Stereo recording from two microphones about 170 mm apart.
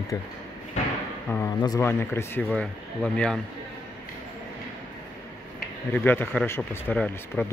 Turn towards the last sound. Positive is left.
turn(degrees=10)  # may be behind; listen again after turning